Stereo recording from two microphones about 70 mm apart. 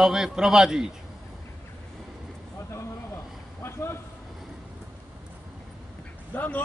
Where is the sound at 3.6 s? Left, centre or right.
Left.